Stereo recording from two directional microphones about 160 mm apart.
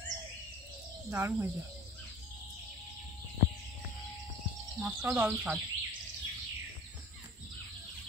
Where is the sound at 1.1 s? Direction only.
15° right (ahead or behind).